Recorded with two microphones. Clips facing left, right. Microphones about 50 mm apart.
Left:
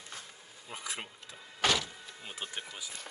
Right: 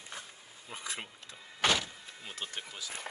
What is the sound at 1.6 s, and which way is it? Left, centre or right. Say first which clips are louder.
Power windows: even; right.